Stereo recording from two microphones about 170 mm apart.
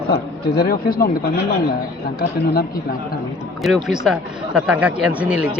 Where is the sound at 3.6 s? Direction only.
Centre (ahead or behind).